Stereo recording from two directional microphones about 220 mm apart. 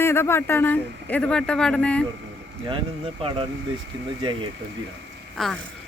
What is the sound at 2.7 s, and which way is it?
Speech, 25° right (ahead or behind).